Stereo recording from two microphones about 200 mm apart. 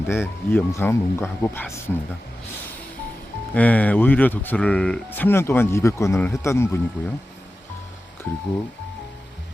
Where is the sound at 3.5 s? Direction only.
5° left (ahead or behind).